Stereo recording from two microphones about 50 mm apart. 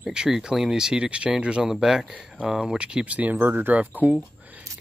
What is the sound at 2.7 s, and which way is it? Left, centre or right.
Speech, right.